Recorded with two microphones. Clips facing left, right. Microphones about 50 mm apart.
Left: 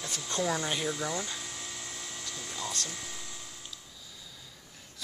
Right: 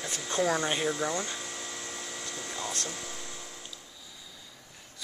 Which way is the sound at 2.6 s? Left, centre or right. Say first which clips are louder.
Right 1 dB; right.